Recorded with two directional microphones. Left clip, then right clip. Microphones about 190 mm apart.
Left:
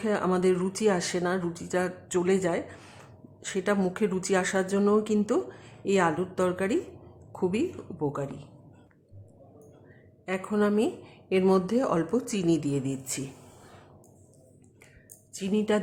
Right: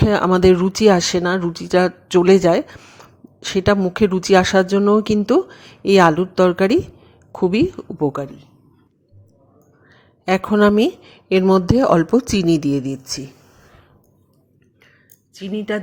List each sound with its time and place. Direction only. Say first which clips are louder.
0.0 s speech: right 12 dB; 45° right (ahead or behind)
2.8 s a sound: right 7 dB; 25° right (ahead or behind)
3.4 s speech: right 11 dB; 40° right (ahead or behind)
10.2 s speech: right 13 dB; 45° right (ahead or behind); by 13.2 s 30° right (ahead or behind)
15.4 s speech: right 3 dB; 15° right (ahead or behind)